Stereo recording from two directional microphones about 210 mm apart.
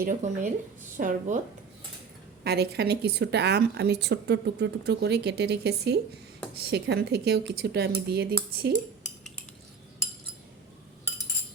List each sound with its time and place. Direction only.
0.0 s speech: 35° right (ahead or behind)
2.4 s speech: 50° right (ahead or behind)